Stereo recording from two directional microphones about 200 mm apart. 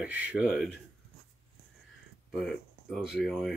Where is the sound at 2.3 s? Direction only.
Centre (ahead or behind).